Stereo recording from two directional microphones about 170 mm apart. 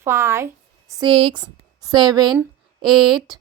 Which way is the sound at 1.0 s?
30° right (ahead or behind).